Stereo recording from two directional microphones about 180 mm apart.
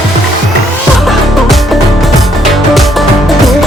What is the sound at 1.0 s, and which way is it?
Music, centre (ahead or behind).